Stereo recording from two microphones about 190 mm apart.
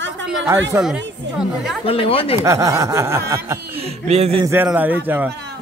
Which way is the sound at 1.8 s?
30° left (ahead or behind).